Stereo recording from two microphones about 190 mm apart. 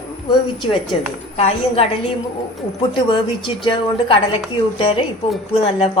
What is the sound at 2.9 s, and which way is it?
A woman's voice, 25° left (ahead or behind).